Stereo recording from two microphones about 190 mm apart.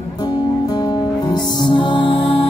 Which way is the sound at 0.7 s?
20° left (ahead or behind).